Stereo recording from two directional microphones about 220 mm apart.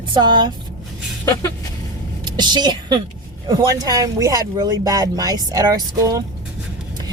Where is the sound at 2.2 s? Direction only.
20° right (ahead or behind).